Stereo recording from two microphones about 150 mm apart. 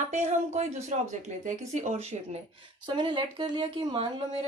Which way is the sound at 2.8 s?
30° right (ahead or behind).